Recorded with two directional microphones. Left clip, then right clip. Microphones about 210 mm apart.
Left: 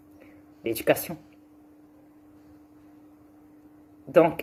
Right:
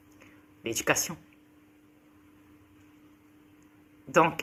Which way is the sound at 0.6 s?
15° right (ahead or behind).